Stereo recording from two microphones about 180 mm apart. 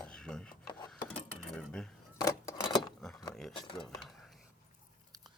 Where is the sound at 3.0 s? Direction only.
Centre (ahead or behind).